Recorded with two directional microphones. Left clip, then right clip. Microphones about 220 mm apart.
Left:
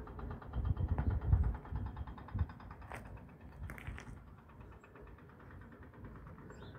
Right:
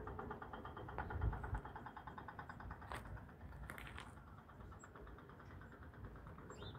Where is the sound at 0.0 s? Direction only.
45° left (ahead or behind).